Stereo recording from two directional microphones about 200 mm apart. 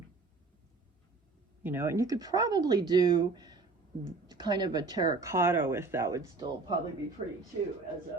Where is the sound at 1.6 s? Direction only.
10° right (ahead or behind).